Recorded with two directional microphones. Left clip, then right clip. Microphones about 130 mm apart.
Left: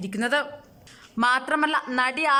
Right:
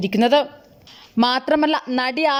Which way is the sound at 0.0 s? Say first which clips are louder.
Right 8 dB; 25° right (ahead or behind).